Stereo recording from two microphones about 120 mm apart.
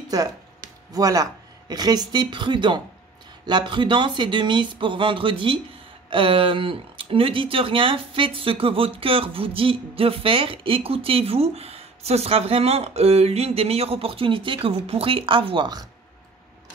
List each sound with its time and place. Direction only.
0.9 s speech: 30° right (ahead or behind)